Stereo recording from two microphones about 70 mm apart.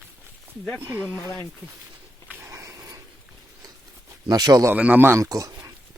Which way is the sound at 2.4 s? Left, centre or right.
Right.